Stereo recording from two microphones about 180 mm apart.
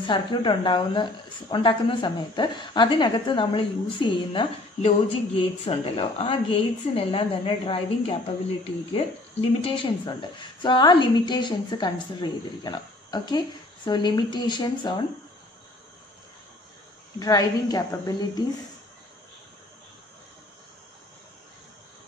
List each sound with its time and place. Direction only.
0.0 s speech: 25° left (ahead or behind)
17.2 s speech: 20° left (ahead or behind)